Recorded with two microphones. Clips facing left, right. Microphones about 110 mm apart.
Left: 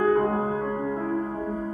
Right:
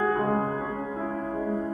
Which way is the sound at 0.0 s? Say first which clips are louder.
Left 3 dB; centre (ahead or behind).